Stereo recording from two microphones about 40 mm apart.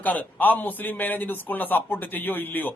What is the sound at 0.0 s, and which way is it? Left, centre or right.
A man's voice, left.